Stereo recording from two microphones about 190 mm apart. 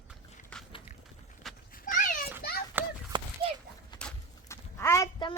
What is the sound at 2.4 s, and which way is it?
Children playing, 55° left (ahead or behind).